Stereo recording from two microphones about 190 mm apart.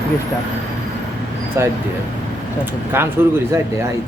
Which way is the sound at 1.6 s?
15° right (ahead or behind).